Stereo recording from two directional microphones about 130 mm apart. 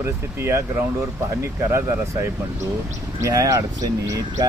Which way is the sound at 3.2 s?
25° right (ahead or behind).